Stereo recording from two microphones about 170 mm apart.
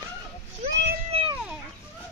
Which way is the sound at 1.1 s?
35° right (ahead or behind).